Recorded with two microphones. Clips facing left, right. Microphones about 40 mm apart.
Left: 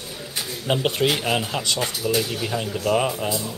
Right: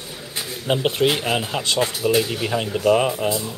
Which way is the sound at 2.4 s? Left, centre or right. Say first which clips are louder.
Right 3 dB; right.